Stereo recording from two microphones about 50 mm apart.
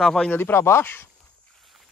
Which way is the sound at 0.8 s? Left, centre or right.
Left.